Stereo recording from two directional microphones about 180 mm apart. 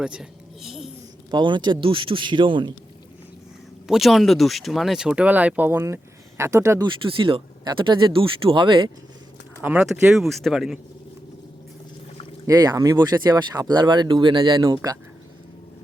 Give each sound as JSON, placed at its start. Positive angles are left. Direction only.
{"t": 0.0, "sound": "speech", "side_deg": -5}
{"t": 1.3, "sound": "speech", "side_deg": -25}
{"t": 3.8, "sound": "speech", "side_deg": 0}
{"t": 9.6, "sound": "speech", "side_deg": -10}
{"t": 12.5, "sound": "speech", "side_deg": -20}